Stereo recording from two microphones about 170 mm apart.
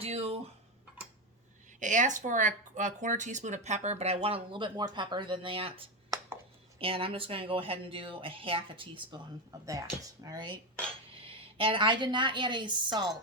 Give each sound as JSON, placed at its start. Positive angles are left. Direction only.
{"t": 0.0, "sound": "fowl", "side_deg": -35}
{"t": 1.8, "sound": "a woman's voice", "side_deg": -50}